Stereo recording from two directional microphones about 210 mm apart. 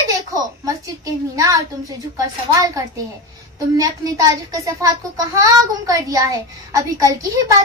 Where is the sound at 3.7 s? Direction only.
15° right (ahead or behind).